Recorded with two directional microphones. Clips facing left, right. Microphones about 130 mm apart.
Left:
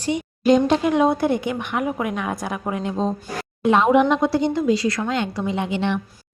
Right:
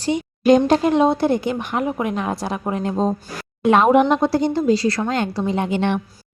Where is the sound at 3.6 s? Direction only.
60° right (ahead or behind).